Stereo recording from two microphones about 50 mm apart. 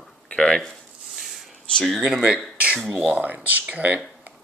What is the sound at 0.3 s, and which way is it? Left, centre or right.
Speech, centre.